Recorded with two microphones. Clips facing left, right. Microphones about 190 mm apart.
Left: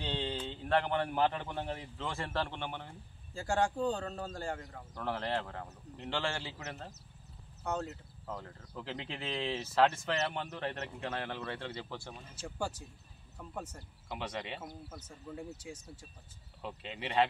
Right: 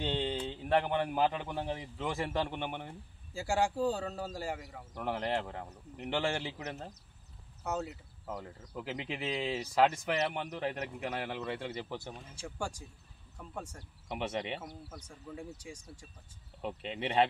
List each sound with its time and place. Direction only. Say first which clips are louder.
0.0 s a man's voice: right 3 dB; 15° right (ahead or behind)
12.4 s speech: left 1 dB; 5° left (ahead or behind)
14.1 s speech: right 4 dB; 20° right (ahead or behind)
14.9 s speech: even; 5° left (ahead or behind)
16.6 s speech: right 5 dB; 25° right (ahead or behind)